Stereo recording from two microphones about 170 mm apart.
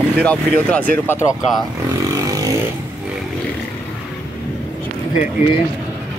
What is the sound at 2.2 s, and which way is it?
Vehicle, 20° right (ahead or behind).